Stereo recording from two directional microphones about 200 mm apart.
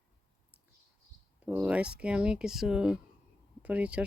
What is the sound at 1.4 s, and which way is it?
Speech, 5° right (ahead or behind).